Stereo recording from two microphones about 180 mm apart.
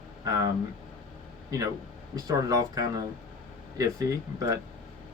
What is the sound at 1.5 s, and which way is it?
A man's voice, 20° right (ahead or behind).